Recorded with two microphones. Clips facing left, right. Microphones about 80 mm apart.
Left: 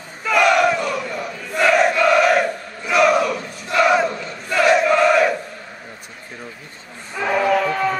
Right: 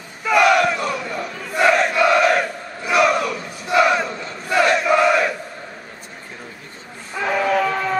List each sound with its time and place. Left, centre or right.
0.2 s battle cry: centre
7.2 s a sound: centre
7.7 s music: centre